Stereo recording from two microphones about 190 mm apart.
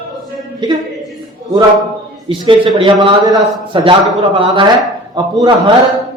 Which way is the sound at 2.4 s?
25° right (ahead or behind).